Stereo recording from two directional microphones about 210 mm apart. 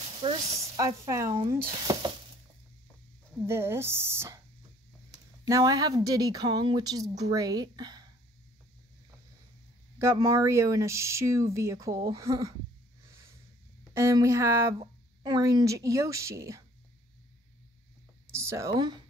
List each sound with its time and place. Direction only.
0.2 s speech: 25° right (ahead or behind)
3.4 s speech: 10° right (ahead or behind)
5.5 s speech: 15° right (ahead or behind)
9.9 s speech: 15° right (ahead or behind)
13.9 s speech: 15° right (ahead or behind)
18.3 s speech: 15° right (ahead or behind)